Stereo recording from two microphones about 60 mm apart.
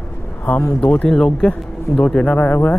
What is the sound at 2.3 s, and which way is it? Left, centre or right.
Speech, left.